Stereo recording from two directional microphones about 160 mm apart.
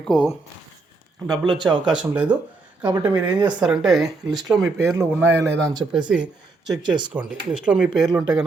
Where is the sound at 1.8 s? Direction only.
5° right (ahead or behind).